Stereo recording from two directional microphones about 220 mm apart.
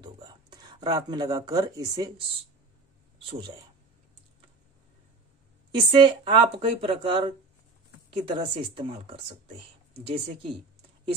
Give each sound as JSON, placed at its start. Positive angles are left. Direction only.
{"t": 0.0, "sound": "speech", "side_deg": -20}
{"t": 3.3, "sound": "speech", "side_deg": -20}
{"t": 5.9, "sound": "speech", "side_deg": -25}